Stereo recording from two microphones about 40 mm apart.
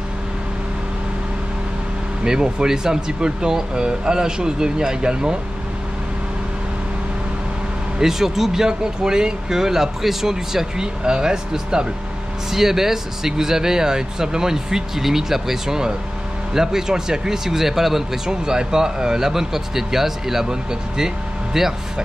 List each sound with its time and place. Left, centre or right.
2.2 s speech: centre
8.0 s speech: centre
21.5 s speech: centre